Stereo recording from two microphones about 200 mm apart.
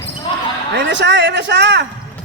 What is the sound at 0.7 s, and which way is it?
A man's voice, 60° right (ahead or behind).